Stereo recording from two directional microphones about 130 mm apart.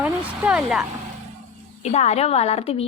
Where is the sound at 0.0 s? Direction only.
10° right (ahead or behind).